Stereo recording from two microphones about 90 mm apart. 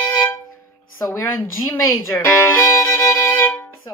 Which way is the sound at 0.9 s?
30° left (ahead or behind).